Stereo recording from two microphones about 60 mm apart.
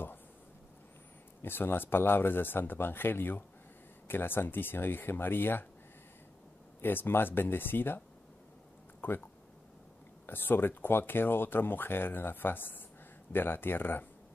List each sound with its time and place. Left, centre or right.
1.4 s speech: left
6.8 s speech: left
9.0 s speech: left
10.2 s speech: left